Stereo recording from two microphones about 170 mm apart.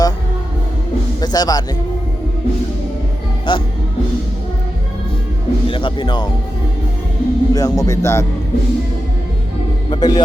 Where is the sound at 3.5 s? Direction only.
30° left (ahead or behind).